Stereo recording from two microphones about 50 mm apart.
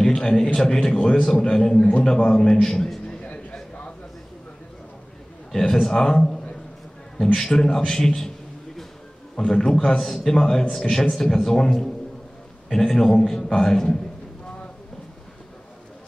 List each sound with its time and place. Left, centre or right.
0.0 s a man's voice: centre
3.1 s a sound: left
5.5 s a man's voice: centre
9.4 s a man's voice: centre